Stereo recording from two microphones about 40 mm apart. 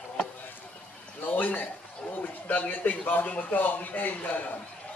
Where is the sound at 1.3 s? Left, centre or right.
Left.